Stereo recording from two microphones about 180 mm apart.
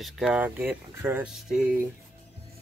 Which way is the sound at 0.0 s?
5° right (ahead or behind).